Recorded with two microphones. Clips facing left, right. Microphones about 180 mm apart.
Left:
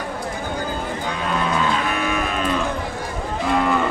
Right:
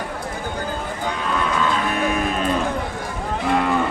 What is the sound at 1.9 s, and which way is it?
Music, 40° right (ahead or behind).